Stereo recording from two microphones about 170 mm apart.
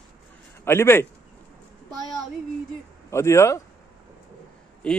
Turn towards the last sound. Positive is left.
turn(degrees=5)  # may be behind; listen again after turning